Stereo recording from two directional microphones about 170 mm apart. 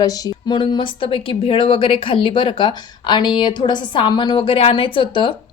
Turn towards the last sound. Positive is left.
turn(degrees=30)  # may be behind; listen again after turning